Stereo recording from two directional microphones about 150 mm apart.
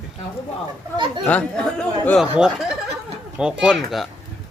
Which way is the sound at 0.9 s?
30° right (ahead or behind).